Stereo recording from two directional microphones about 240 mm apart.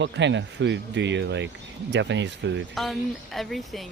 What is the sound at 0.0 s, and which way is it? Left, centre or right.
Speech, right.